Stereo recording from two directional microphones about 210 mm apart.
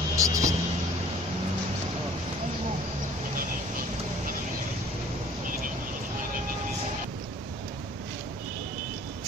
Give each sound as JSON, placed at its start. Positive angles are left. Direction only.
{"t": 0.1, "sound": "vehicle", "side_deg": -15}